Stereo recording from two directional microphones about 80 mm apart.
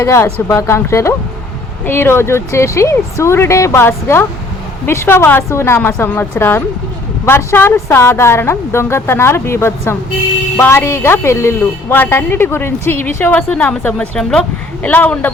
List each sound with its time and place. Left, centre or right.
0.0 s a woman's voice: left
6.1 s a woman's voice: centre
7.3 s a woman's voice: left; by 14.4 s centre
14.8 s a woman's voice: left